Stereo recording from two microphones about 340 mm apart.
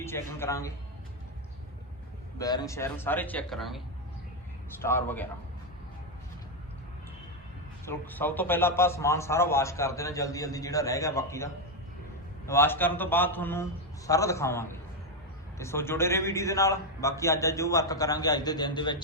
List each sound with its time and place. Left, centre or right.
0.0 s a man's voice: centre
2.4 s a man's voice: centre
4.8 s a man's voice: centre
7.9 s a man's voice: centre